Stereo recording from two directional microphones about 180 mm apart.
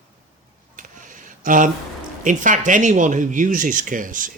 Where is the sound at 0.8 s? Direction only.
45° right (ahead or behind).